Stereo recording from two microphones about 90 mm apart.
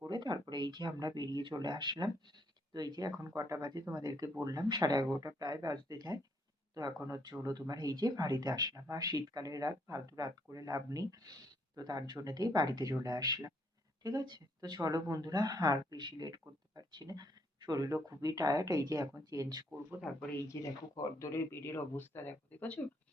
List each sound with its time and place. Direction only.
0.1 s speech: 60° right (ahead or behind); by 3.6 s 35° right (ahead or behind)
3.6 s speech: 50° right (ahead or behind)
20.1 s speech: 5° right (ahead or behind)
20.5 s speech: 40° left (ahead or behind); by 22.8 s 20° left (ahead or behind)